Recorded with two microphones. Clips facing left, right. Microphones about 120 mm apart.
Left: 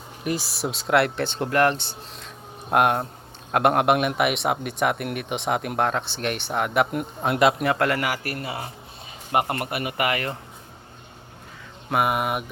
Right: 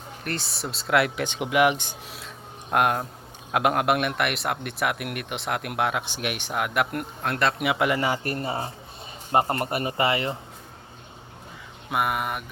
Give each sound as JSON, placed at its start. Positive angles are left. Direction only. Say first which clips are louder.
{"t": 0.3, "sound": "a man's voice", "louder": "left 5 dB", "side_deg": 5}
{"t": 1.2, "sound": "speech", "louder": "left 1 dB", "side_deg": -10}
{"t": 2.2, "sound": "a sound", "louder": "left 1 dB", "side_deg": 0}
{"t": 3.5, "sound": "a man's voice", "louder": "left 3 dB", "side_deg": 0}
{"t": 7.2, "sound": "speech", "louder": "left 6 dB", "side_deg": 10}
{"t": 7.6, "sound": "a man's voice", "louder": "left 1 dB", "side_deg": -10}
{"t": 11.9, "sound": "a man's voice", "louder": "left 3 dB", "side_deg": 5}